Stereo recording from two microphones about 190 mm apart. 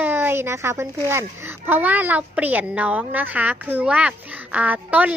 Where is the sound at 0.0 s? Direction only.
10° right (ahead or behind).